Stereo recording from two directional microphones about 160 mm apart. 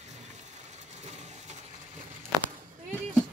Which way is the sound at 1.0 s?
45° right (ahead or behind).